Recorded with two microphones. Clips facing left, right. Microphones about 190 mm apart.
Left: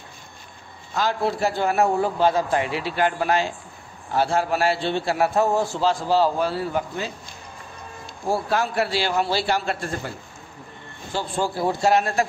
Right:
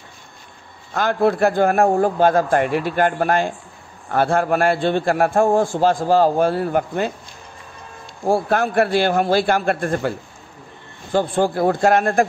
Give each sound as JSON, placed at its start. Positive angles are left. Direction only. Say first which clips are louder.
{"t": 0.9, "sound": "a man's voice", "louder": "right 6 dB", "side_deg": -55}
{"t": 8.3, "sound": "a man's voice", "louder": "right 5 dB", "side_deg": -55}
{"t": 11.1, "sound": "a man's voice", "louder": "right 7 dB", "side_deg": -55}